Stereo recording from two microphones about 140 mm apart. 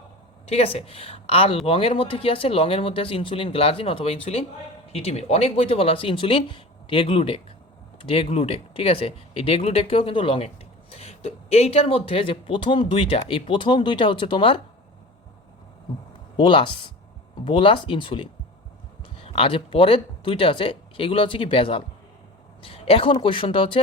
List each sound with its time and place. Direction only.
0.4 s speech: 45° left (ahead or behind)
16.4 s speech: 35° left (ahead or behind)